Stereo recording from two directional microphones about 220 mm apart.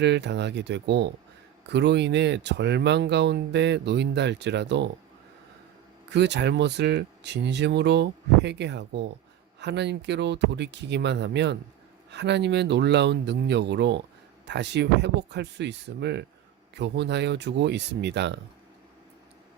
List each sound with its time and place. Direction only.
0.0 s speech: 50° right (ahead or behind)
6.1 s speech: 50° right (ahead or behind)